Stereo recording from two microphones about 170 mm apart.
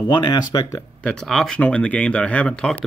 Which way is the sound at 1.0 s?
5° left (ahead or behind).